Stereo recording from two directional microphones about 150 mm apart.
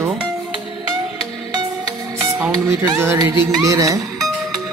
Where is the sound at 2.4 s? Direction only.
15° right (ahead or behind).